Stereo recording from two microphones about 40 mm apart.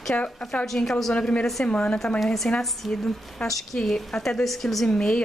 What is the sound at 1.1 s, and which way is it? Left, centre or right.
Speech, left.